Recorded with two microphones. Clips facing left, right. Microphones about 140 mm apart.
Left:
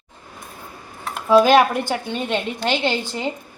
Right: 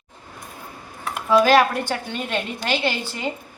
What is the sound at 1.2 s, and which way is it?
A woman's voice, 20° left (ahead or behind).